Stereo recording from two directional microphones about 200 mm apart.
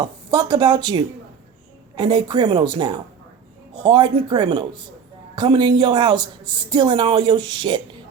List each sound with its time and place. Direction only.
0.0 s speech: 20° right (ahead or behind)